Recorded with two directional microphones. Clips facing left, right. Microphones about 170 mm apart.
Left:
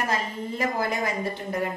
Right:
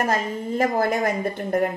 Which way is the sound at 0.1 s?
50° right (ahead or behind).